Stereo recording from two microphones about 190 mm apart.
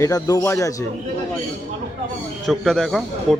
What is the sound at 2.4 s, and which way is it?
Speech, centre (ahead or behind).